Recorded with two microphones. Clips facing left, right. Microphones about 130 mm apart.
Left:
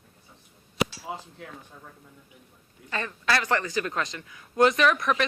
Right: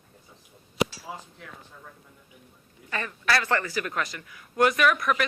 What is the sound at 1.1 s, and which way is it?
Speech, 20° left (ahead or behind).